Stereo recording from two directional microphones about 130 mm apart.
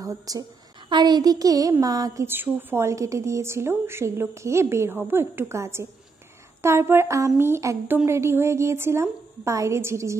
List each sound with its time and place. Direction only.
0.0 s a child's voice: 25° right (ahead or behind)
2.2 s a woman's voice: 15° right (ahead or behind)